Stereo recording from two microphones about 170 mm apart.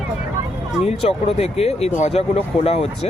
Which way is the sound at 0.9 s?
40° left (ahead or behind).